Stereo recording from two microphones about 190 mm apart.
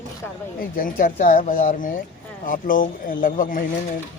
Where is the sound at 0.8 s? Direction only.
45° left (ahead or behind).